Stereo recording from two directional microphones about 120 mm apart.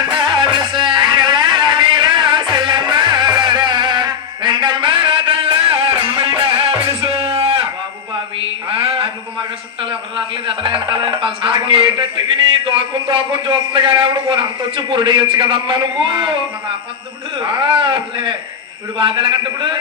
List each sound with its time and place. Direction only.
0.1 s music: 40° right (ahead or behind)
8.7 s a sound: 50° right (ahead or behind)
10.2 s speech: 45° right (ahead or behind)
17.4 s speech: 45° right (ahead or behind)